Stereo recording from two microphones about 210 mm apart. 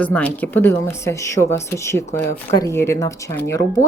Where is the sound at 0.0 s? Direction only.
5° left (ahead or behind).